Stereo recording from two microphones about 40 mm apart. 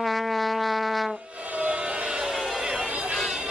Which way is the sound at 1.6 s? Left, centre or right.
Right.